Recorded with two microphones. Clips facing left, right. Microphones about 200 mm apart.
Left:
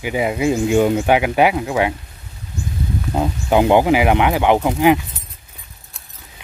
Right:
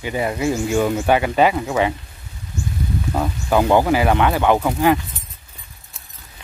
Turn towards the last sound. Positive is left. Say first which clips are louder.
# left 2 dB
turn(degrees=15)  # may be behind; listen again after turning